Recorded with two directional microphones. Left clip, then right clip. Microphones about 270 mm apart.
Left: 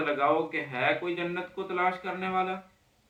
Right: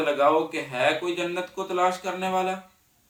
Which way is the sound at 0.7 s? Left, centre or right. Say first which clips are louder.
Right 5 dB; centre.